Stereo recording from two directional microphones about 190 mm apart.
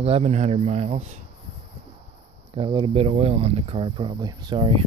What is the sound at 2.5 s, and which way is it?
Speech, 25° right (ahead or behind).